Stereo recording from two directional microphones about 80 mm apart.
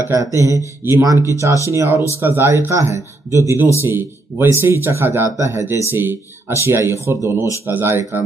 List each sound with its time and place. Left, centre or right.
0.1 s speech: right